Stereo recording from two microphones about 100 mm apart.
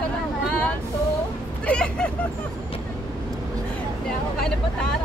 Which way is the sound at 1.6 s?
10° left (ahead or behind).